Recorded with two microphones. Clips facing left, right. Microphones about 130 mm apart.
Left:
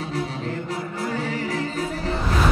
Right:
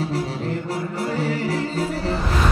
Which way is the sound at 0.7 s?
30° right (ahead or behind).